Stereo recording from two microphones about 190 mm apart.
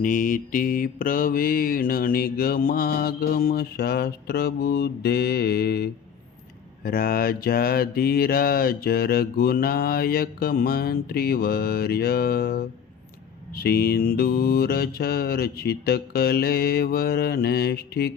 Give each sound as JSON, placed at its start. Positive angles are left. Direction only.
{"t": 0.0, "sound": "mantra", "side_deg": 45}